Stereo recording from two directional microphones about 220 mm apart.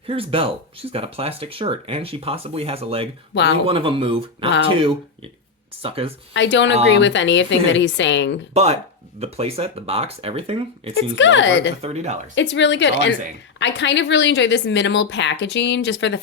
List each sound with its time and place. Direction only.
0.1 s speech: 25° right (ahead or behind)
6.3 s a woman's voice: 55° left (ahead or behind)
9.2 s speech: 30° right (ahead or behind)
10.9 s a woman's voice: 55° left (ahead or behind)
11.8 s speech: 30° right (ahead or behind)
12.3 s a woman's voice: 55° left (ahead or behind)